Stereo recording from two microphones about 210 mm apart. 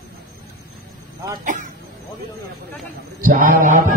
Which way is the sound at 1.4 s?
35° right (ahead or behind).